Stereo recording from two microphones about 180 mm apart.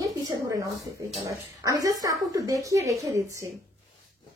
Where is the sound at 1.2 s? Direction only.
20° right (ahead or behind).